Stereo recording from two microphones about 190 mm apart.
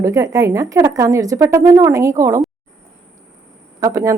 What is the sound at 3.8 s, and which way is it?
Speech, 15° right (ahead or behind).